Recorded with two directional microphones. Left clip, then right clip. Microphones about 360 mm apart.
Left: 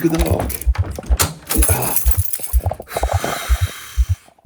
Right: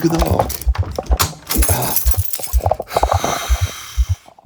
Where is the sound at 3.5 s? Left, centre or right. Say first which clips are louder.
Right 2 dB; centre.